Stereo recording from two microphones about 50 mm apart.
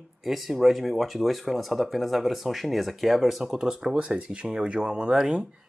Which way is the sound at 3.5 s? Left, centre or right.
Centre.